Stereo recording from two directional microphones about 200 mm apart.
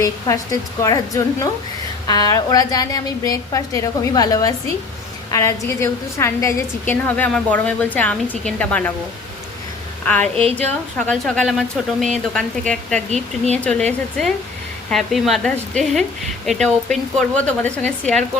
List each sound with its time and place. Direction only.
0.3 s a woman's voice: 15° left (ahead or behind)
10.1 s speech: 5° left (ahead or behind)
14.8 s speech: centre (ahead or behind)